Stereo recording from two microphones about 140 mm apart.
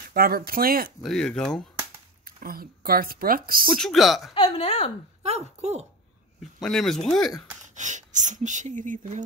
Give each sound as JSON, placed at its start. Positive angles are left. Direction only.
{"t": 0.1, "sound": "speech", "side_deg": -90}
{"t": 1.0, "sound": "speech", "side_deg": 5}
{"t": 2.2, "sound": "speech", "side_deg": -90}
{"t": 3.7, "sound": "speech", "side_deg": 0}
{"t": 4.3, "sound": "a woman's voice", "side_deg": 40}
{"t": 5.2, "sound": "speech", "side_deg": -50}
{"t": 6.6, "sound": "speech", "side_deg": 5}
{"t": 7.7, "sound": "speech", "side_deg": -60}